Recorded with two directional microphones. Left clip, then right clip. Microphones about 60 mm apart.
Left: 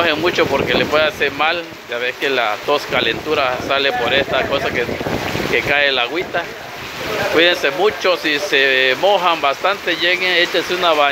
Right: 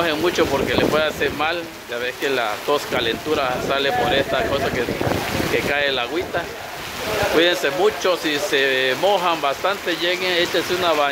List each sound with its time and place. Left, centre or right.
0.0 s speech: centre
5.7 s speech: centre
10.0 s speech: right